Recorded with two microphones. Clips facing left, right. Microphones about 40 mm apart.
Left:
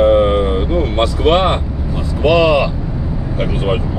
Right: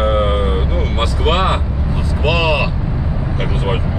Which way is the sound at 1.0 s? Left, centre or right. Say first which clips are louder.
Left 4 dB; centre.